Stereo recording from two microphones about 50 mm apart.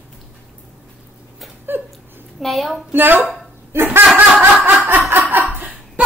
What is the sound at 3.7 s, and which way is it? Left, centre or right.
Speech, right.